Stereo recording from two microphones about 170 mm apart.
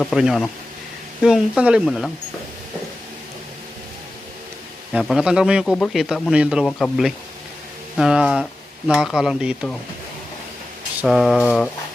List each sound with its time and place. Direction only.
0.0 s speech: centre (ahead or behind)
4.9 s speech: 5° right (ahead or behind)
6.7 s speech: 5° left (ahead or behind)
11.0 s speech: centre (ahead or behind)